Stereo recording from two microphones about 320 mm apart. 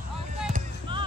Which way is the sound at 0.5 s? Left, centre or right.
Centre.